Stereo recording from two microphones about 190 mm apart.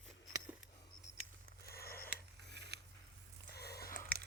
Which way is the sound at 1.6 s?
55° left (ahead or behind).